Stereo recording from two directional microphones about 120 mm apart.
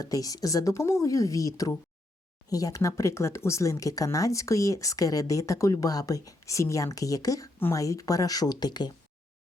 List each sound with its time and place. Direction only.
0.0 s speech: 30° left (ahead or behind)